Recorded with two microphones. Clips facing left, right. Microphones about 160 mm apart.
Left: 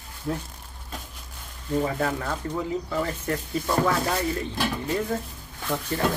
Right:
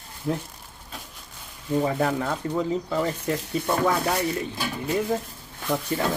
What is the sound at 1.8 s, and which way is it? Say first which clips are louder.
Speech: right 2 dB; 15° right (ahead or behind).